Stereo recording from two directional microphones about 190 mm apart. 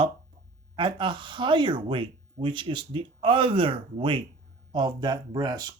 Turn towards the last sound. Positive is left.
turn(degrees=-20)  # may be behind; listen again after turning